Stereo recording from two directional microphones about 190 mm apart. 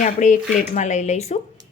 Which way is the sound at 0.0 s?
40° left (ahead or behind).